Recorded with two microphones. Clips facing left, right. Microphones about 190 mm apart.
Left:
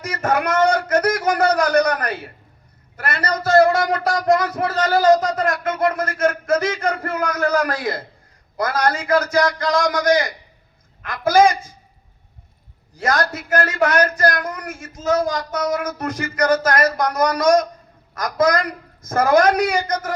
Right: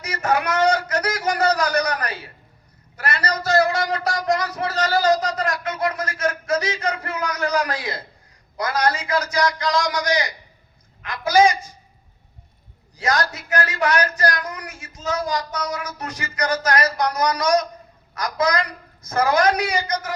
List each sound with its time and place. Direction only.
0.0 s a sound: 50° left (ahead or behind)
3.0 s speech: 50° left (ahead or behind)
13.0 s speech: 50° left (ahead or behind)